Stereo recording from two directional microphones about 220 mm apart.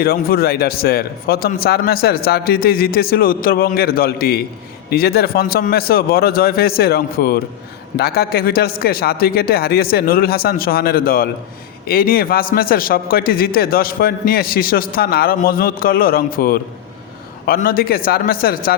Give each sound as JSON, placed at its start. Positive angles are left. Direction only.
{"t": 0.0, "sound": "a man's voice", "side_deg": 45}